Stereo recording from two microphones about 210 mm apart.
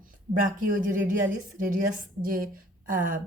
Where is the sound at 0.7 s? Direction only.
40° right (ahead or behind).